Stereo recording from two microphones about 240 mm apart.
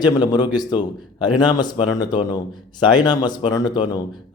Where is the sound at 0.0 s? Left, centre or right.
Centre.